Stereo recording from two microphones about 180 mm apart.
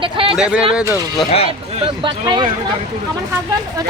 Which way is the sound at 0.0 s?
30° right (ahead or behind).